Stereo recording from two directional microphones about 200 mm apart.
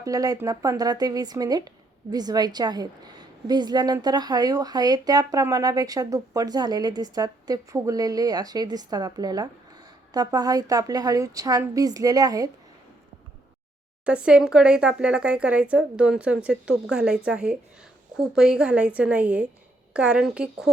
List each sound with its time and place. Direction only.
0.0 s a woman's voice: 20° right (ahead or behind)
14.0 s speech: 5° right (ahead or behind)